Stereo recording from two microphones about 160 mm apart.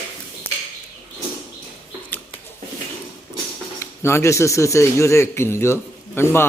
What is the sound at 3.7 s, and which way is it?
Speech, 15° left (ahead or behind).